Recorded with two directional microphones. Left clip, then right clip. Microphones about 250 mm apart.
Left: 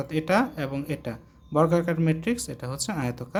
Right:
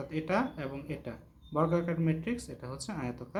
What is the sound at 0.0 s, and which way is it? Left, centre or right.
Speech, left.